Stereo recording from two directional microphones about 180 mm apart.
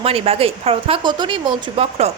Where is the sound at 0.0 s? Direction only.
30° right (ahead or behind).